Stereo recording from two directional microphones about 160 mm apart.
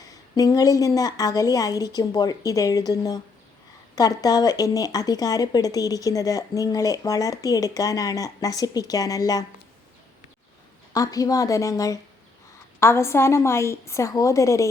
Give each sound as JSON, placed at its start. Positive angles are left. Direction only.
{"t": 0.0, "sound": "speech", "side_deg": 20}
{"t": 10.9, "sound": "a woman's voice", "side_deg": 20}